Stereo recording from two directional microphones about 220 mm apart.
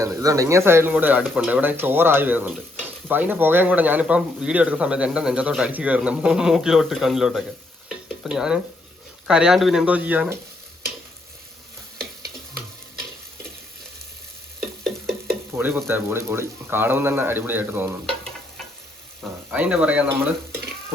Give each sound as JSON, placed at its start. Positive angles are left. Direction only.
{"t": 0.0, "sound": "speech", "side_deg": -15}
{"t": 7.9, "sound": "stir", "side_deg": -5}
{"t": 9.2, "sound": "speech", "side_deg": -5}
{"t": 15.5, "sound": "speech", "side_deg": -10}
{"t": 19.5, "sound": "speech", "side_deg": -5}